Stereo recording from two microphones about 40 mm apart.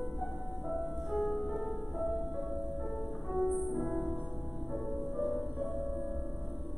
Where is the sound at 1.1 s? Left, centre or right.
Centre.